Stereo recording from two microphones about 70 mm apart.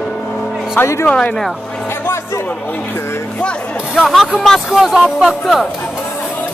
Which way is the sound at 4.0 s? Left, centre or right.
Centre.